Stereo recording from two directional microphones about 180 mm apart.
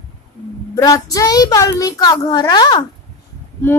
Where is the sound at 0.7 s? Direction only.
20° left (ahead or behind).